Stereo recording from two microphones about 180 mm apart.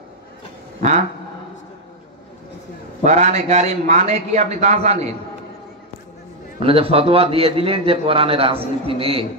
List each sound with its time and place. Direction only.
3.0 s a man's voice: 40° right (ahead or behind)
6.6 s a man's voice: 30° right (ahead or behind)